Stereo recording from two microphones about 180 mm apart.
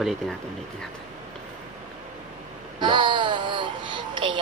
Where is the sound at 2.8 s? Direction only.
25° right (ahead or behind).